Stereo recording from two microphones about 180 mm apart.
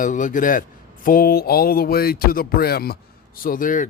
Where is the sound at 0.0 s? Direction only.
45° left (ahead or behind).